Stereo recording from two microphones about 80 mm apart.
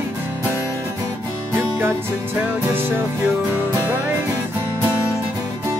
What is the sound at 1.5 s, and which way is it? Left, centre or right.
Music, right.